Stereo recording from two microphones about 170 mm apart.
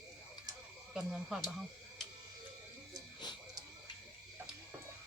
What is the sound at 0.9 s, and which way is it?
Speech, 5° right (ahead or behind).